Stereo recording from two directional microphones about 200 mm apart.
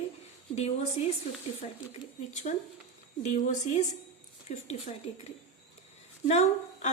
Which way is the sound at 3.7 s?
35° left (ahead or behind).